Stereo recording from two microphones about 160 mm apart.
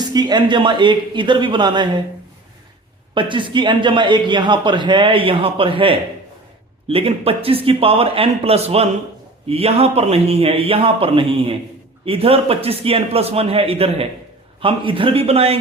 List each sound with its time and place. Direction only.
0.0 s a man's voice: 25° right (ahead or behind)
3.2 s a man's voice: 30° right (ahead or behind)